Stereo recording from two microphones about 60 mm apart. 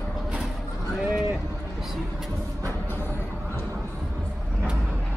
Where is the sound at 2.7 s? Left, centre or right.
Left.